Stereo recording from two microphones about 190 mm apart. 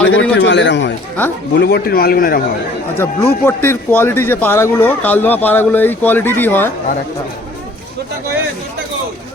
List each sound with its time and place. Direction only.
0.1 s a man's voice: 80° left
1.5 s a man's voice: 55° left (ahead or behind)
3.0 s speech: 15° left (ahead or behind)